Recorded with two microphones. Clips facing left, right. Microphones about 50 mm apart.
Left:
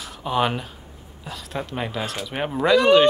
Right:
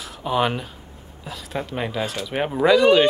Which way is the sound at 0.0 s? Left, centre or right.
Centre.